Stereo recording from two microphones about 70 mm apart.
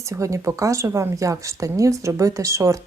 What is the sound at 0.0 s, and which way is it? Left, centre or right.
Speech, right.